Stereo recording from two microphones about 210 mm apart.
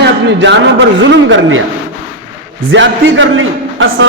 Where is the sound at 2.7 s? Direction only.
60° right (ahead or behind).